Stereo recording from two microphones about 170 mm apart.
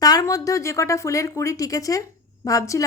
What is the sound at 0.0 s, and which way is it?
A woman's voice, 20° left (ahead or behind).